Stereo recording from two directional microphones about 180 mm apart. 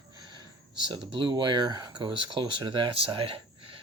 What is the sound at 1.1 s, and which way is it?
Speech, 25° right (ahead or behind).